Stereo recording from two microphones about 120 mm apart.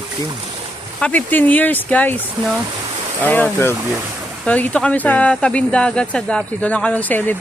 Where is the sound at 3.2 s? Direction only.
15° left (ahead or behind).